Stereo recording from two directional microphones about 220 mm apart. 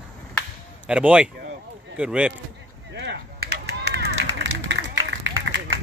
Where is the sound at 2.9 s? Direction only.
50° right (ahead or behind).